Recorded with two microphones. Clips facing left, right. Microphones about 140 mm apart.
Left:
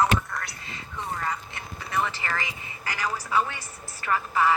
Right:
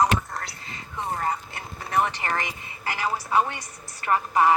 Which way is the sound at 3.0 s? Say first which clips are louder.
Right 3 dB; 30° right (ahead or behind).